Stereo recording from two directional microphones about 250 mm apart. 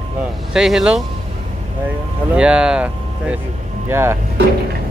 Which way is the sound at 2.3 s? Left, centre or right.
Centre.